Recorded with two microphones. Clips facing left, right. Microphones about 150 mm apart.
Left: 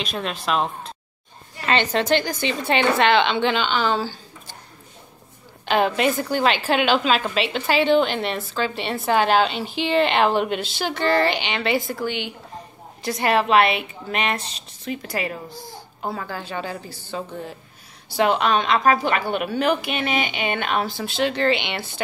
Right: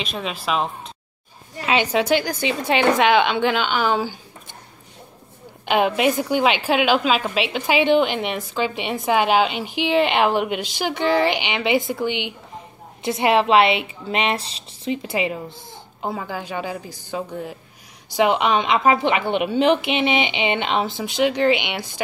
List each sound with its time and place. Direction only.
0.0 s speech: centre (ahead or behind)
1.7 s a woman's voice: 10° right (ahead or behind)
5.7 s a woman's voice: 10° right (ahead or behind)